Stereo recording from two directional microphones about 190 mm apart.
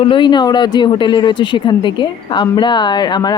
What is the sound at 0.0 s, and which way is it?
Speech, 25° left (ahead or behind).